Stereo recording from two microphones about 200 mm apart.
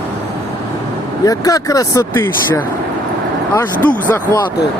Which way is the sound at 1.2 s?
15° left (ahead or behind).